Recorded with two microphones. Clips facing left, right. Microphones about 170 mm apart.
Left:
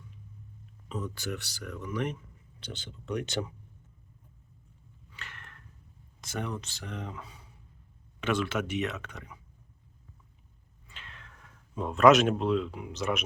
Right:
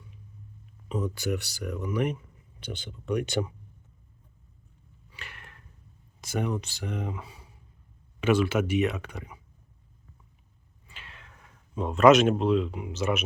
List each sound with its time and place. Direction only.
0.9 s speech: 15° right (ahead or behind)
3.4 s speech: 40° right (ahead or behind)
5.1 s a sound: 10° right (ahead or behind)
6.2 s speech: 10° right (ahead or behind)
10.8 s speech: 5° right (ahead or behind)